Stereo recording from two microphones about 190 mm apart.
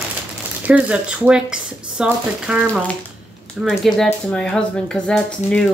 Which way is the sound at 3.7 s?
Centre (ahead or behind).